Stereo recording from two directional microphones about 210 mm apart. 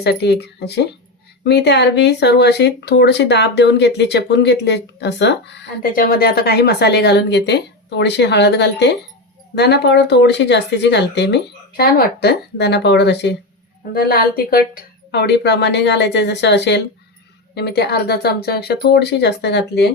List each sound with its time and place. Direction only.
0.0 s speech: 50° left (ahead or behind)